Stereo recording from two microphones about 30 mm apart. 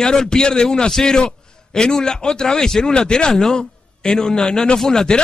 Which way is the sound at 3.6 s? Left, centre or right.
Left.